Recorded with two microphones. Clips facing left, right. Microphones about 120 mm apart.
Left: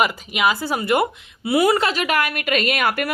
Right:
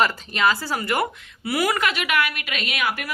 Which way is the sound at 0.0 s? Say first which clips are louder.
Left 1 dB; 15° left (ahead or behind).